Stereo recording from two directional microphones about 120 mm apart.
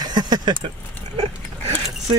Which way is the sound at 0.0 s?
35° right (ahead or behind).